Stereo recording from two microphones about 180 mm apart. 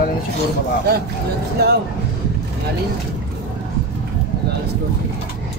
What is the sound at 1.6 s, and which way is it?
Speech, 65° right (ahead or behind).